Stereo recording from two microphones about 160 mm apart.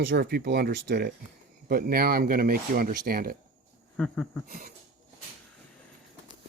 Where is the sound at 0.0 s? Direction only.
90° right.